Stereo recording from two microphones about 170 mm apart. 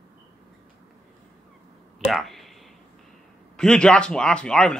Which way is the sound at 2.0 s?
Centre (ahead or behind).